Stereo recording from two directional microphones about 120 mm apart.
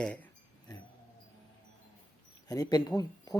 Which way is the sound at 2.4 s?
35° left (ahead or behind).